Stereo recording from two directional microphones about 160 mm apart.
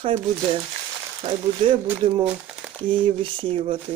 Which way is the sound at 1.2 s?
35° right (ahead or behind).